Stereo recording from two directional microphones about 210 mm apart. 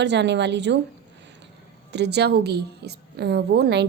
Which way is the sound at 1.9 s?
55° right (ahead or behind).